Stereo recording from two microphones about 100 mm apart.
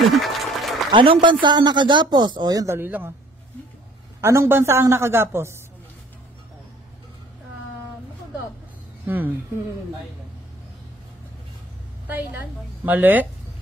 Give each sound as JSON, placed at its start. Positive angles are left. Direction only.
{"t": 0.0, "sound": "applause", "side_deg": 0}
{"t": 0.9, "sound": "speech", "side_deg": -60}
{"t": 2.7, "sound": "a woman's voice", "side_deg": -20}
{"t": 4.2, "sound": "a woman's voice", "side_deg": -25}
{"t": 9.0, "sound": "a woman's voice", "side_deg": -20}
{"t": 12.1, "sound": "a woman's voice", "side_deg": -15}